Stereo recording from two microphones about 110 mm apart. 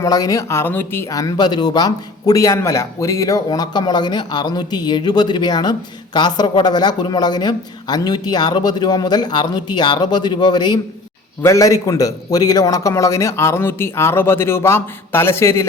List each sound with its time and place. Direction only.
0.0 s a man's voice: 35° left (ahead or behind)
1.1 s speech: 35° left (ahead or behind)
11.4 s a man's voice: 30° left (ahead or behind)